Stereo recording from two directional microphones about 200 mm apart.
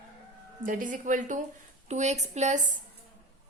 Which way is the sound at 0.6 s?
40° right (ahead or behind).